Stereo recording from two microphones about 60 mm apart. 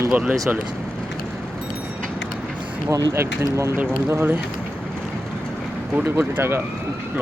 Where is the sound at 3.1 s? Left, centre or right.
Right.